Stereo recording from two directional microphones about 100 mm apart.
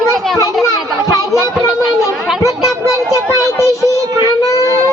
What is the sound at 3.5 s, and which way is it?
Child singing, 30° left (ahead or behind).